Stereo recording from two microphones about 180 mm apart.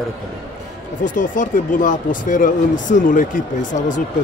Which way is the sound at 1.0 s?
45° left (ahead or behind).